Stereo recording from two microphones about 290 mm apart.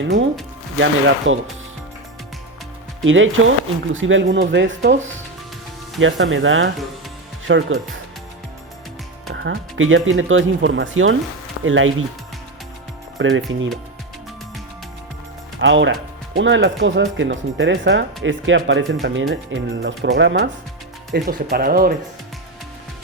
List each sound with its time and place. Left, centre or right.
0.0 s speech: right
3.0 s speech: right
6.0 s speech: right
9.3 s speech: right
13.1 s speech: right
15.6 s speech: right